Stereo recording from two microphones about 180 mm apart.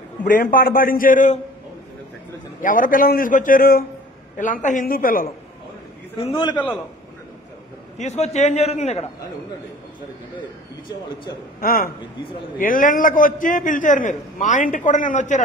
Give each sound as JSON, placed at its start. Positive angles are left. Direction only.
{"t": 0.2, "sound": "a man's voice", "side_deg": 50}
{"t": 2.6, "sound": "a man's voice", "side_deg": 50}
{"t": 6.1, "sound": "a man's voice", "side_deg": 25}
{"t": 8.0, "sound": "a man's voice", "side_deg": 40}
{"t": 11.6, "sound": "a man's voice", "side_deg": 55}